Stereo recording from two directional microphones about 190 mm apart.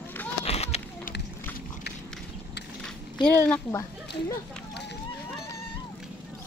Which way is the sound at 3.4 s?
15° left (ahead or behind).